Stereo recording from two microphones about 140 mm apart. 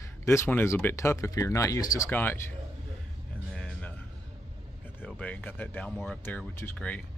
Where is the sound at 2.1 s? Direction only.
15° left (ahead or behind).